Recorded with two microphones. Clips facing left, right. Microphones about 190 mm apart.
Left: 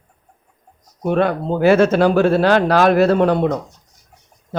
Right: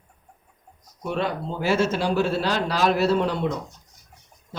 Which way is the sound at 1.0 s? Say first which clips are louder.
Left 9 dB; 55° left (ahead or behind).